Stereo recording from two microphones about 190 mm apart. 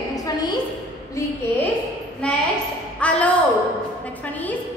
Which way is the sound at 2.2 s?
5° left (ahead or behind).